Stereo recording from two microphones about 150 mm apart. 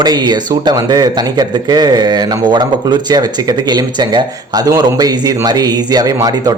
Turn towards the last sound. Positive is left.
turn(degrees=-25)  # may be behind; listen again after turning